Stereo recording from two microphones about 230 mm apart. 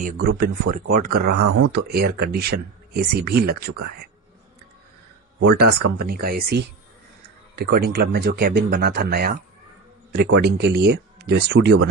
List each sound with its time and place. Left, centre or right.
0.0 s speech: right
5.4 s speech: right